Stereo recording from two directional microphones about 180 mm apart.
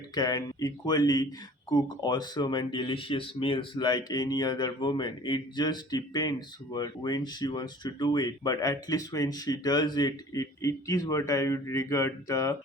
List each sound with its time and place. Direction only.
0.1 s speech: 20° left (ahead or behind)